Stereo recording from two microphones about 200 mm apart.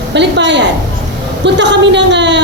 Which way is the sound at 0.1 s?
60° right (ahead or behind).